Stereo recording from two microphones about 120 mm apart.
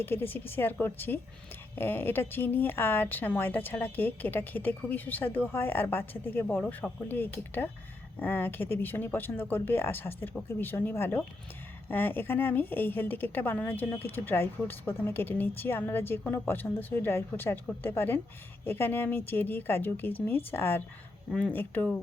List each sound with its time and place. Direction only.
0.0 s a woman's voice: 20° left (ahead or behind)